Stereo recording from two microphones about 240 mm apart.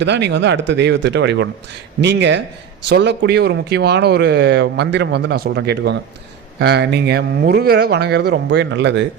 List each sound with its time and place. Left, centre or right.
0.0 s speech: right